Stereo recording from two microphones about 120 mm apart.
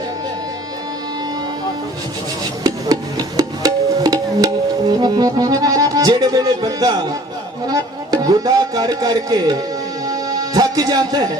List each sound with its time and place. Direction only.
2.6 s music: 30° right (ahead or behind)